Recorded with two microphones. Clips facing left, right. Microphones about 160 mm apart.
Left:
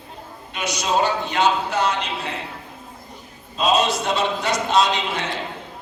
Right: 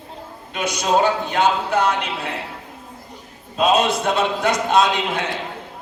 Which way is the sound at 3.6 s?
55° right (ahead or behind).